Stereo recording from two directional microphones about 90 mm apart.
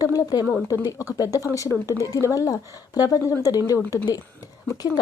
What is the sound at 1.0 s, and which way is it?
Speech, 40° left (ahead or behind).